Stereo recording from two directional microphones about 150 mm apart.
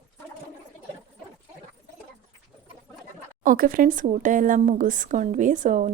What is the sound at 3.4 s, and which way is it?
Speech, 65° right (ahead or behind).